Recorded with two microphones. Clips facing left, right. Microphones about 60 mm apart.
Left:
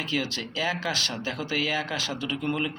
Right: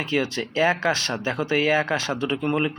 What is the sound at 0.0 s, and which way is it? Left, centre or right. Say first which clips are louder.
Speech: right 5 dB; right.